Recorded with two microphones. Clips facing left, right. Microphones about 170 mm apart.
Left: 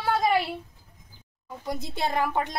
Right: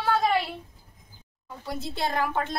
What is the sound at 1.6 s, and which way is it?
Speech, 15° left (ahead or behind).